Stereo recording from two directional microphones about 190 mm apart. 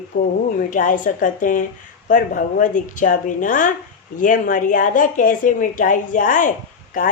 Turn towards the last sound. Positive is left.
turn(degrees=45)  # may be behind; listen again after turning